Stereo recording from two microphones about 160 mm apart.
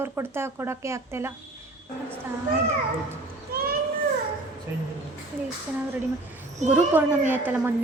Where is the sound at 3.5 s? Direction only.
70° right (ahead or behind).